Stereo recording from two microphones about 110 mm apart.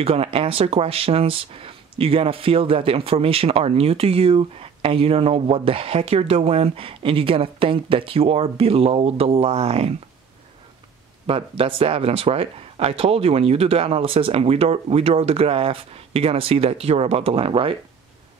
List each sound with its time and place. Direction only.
0.0 s speech: 60° right (ahead or behind)
11.2 s speech: 55° right (ahead or behind)